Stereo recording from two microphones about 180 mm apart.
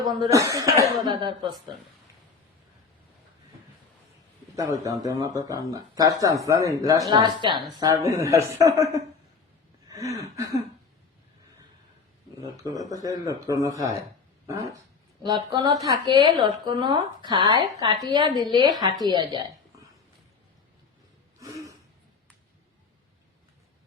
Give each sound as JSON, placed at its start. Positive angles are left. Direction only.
{"t": 0.0, "sound": "a woman's voice", "side_deg": -20}
{"t": 4.5, "sound": "a woman's voice", "side_deg": -20}
{"t": 9.9, "sound": "a woman's voice", "side_deg": -20}
{"t": 12.6, "sound": "a woman's voice", "side_deg": -20}
{"t": 14.4, "sound": "dog", "side_deg": -20}
{"t": 15.2, "sound": "a woman's voice", "side_deg": -25}
{"t": 21.3, "sound": "throat clearing", "side_deg": -20}